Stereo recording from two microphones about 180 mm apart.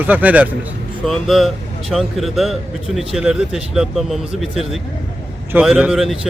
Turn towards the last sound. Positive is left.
turn(degrees=0)  # may be behind; listen again after turning